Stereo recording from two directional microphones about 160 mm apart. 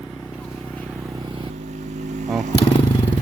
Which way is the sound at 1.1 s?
30° right (ahead or behind).